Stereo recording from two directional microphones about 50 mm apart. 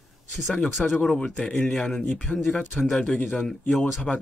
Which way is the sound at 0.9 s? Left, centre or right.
Left.